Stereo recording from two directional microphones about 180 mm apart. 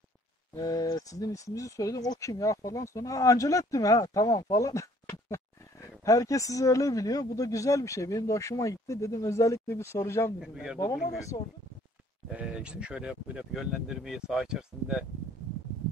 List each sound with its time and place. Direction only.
0.6 s speech: 20° left (ahead or behind)
6.0 s speech: 20° left (ahead or behind)
10.4 s speech: 5° right (ahead or behind)
11.1 s speech: 20° left (ahead or behind)
12.3 s speech: 5° right (ahead or behind)